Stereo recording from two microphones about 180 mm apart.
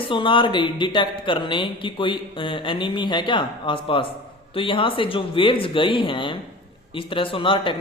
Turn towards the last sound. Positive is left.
turn(degrees=30)  # may be behind; listen again after turning